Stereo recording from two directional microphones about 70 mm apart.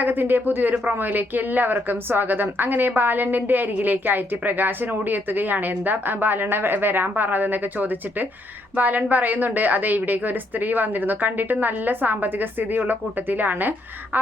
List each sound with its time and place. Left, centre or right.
0.0 s speech: right